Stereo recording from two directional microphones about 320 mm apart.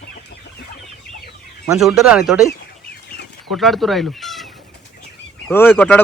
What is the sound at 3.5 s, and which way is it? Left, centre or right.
Speech, centre.